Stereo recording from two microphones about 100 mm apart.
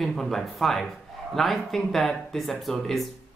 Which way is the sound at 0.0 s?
Centre (ahead or behind).